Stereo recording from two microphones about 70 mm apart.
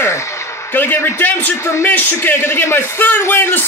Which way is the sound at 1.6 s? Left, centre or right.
Left.